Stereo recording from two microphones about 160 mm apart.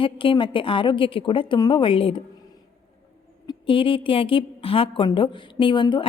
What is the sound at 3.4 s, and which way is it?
A woman's voice, 30° left (ahead or behind).